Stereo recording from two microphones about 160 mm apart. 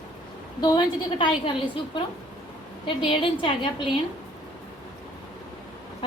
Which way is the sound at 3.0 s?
35° left (ahead or behind).